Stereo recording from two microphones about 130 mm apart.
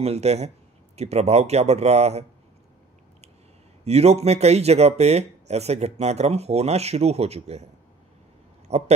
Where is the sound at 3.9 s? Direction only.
55° right (ahead or behind).